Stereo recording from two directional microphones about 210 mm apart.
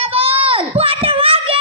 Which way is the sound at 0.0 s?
25° right (ahead or behind).